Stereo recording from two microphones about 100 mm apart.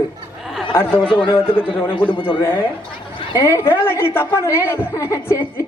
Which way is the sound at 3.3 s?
30° left (ahead or behind).